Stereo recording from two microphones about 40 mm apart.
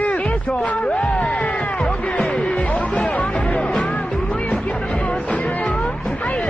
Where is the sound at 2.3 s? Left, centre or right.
Left.